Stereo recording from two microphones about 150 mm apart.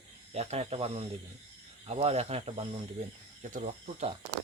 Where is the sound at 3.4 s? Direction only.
55° right (ahead or behind).